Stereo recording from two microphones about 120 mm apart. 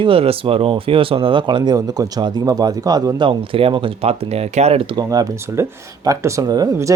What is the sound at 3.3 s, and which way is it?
Speech, 50° right (ahead or behind).